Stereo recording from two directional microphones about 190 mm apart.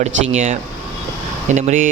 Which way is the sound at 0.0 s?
35° right (ahead or behind).